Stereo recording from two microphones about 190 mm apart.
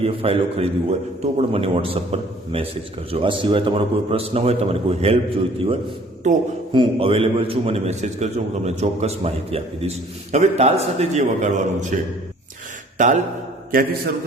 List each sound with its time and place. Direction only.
0.0 s a man's voice: 30° right (ahead or behind)
6.3 s a man's voice: 40° right (ahead or behind)
6.7 s a man's voice: 30° right (ahead or behind)
13.0 s a man's voice: 40° right (ahead or behind)